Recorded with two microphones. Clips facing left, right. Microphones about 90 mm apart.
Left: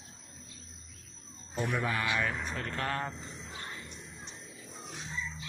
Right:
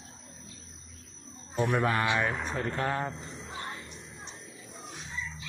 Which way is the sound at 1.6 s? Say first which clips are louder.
Right 5 dB; 50° right (ahead or behind).